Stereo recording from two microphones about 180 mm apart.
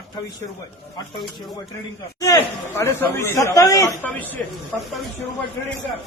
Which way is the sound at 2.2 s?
15° left (ahead or behind).